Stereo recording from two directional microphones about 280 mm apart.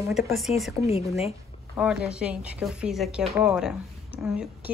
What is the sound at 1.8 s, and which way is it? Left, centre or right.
A woman's voice, centre.